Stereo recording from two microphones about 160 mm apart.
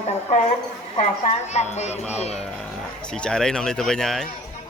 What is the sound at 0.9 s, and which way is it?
A woman's voice, 45° left (ahead or behind).